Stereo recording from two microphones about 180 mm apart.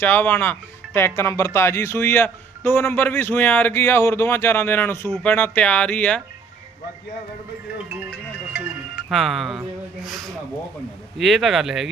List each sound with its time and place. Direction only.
0.0 s speech: 10° left (ahead or behind)
9.0 s speech: centre (ahead or behind)